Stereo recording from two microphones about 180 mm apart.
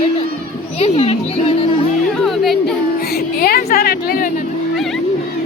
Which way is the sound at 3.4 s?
60° left (ahead or behind).